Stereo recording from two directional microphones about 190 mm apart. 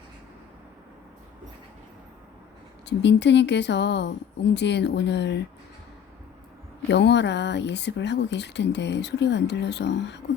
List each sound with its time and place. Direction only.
2.8 s speech: 65° left (ahead or behind)
6.8 s speech: 65° left (ahead or behind)